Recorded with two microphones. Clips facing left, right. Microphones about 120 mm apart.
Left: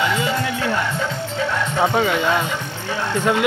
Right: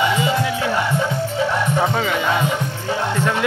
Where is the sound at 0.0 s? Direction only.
15° right (ahead or behind).